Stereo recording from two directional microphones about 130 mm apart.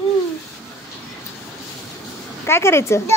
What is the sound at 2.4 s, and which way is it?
Speech, 20° left (ahead or behind).